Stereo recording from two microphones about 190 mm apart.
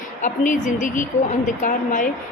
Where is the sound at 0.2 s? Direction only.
40° left (ahead or behind).